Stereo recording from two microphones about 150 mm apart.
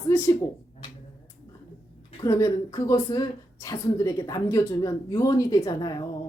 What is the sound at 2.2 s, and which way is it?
A woman's voice, 25° left (ahead or behind).